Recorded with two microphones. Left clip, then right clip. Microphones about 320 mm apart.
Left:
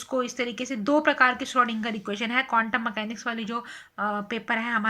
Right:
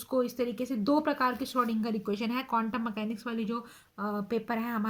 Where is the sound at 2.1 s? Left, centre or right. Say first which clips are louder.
Left 7 dB; left.